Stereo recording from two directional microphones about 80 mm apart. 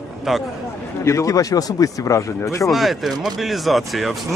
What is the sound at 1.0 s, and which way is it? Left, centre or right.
Speech, left.